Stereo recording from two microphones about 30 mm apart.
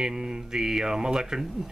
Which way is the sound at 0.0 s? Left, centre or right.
Right.